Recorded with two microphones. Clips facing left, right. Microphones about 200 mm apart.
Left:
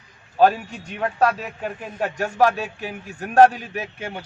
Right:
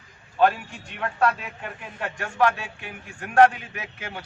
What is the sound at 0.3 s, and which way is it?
A man's voice, 40° left (ahead or behind).